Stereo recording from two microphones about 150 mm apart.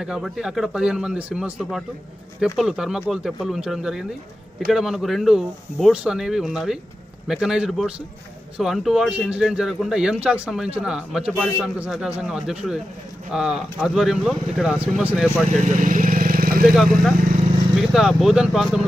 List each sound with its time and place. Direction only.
0.0 s speech: 5° right (ahead or behind)
15.5 s vehicle: 55° right (ahead or behind); by 16.7 s 75° right (ahead or behind)
17.7 s speech: centre (ahead or behind)